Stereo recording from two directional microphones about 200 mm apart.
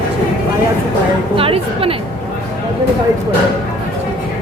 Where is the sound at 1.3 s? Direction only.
30° right (ahead or behind).